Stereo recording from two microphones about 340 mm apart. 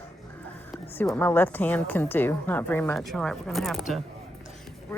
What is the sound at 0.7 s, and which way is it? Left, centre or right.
A woman's voice, centre.